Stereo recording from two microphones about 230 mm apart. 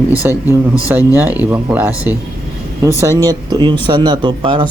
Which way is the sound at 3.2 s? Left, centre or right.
Centre.